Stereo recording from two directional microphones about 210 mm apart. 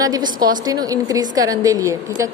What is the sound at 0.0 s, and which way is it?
A woman's voice, 20° right (ahead or behind).